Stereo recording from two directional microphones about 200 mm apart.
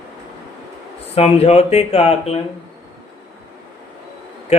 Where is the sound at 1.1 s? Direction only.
30° left (ahead or behind).